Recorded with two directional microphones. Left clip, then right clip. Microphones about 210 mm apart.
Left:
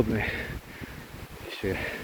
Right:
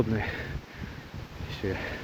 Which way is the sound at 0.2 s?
Centre (ahead or behind).